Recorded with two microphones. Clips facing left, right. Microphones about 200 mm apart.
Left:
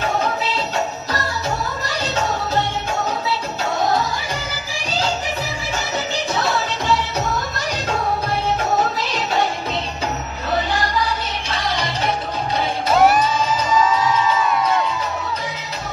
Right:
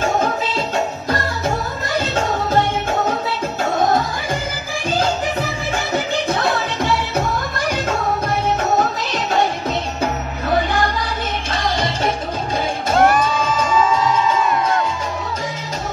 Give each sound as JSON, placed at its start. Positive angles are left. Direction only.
{"t": 2.0, "sound": "music", "side_deg": -50}
{"t": 5.9, "sound": "music", "side_deg": -55}
{"t": 11.5, "sound": "music", "side_deg": -50}